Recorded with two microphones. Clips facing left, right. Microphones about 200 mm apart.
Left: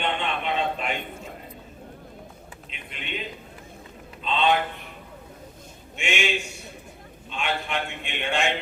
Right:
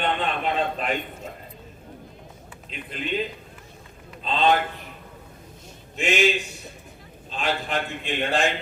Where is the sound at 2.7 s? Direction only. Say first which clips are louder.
Right 9 dB; 35° right (ahead or behind).